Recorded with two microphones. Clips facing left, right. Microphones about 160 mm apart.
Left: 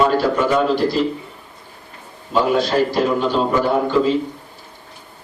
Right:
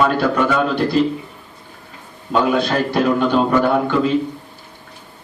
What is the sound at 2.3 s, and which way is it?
A man's voice, 65° right (ahead or behind).